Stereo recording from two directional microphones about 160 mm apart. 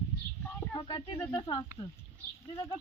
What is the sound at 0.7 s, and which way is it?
A woman's voice, 25° left (ahead or behind).